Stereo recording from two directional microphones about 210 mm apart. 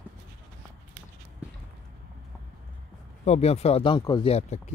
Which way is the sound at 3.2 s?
30° left (ahead or behind).